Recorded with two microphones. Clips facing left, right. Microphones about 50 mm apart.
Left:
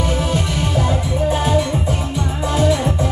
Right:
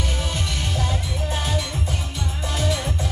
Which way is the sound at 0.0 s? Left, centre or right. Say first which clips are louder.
Left 8 dB; centre.